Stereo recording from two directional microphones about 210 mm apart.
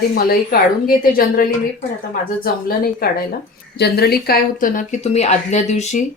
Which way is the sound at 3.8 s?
50° left (ahead or behind).